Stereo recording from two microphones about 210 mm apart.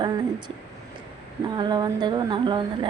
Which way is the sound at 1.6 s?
20° right (ahead or behind).